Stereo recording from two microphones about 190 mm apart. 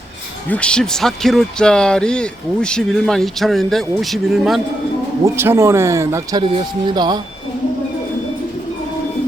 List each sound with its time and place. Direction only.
0.4 s speech: 5° left (ahead or behind)
5.2 s speech: 15° right (ahead or behind)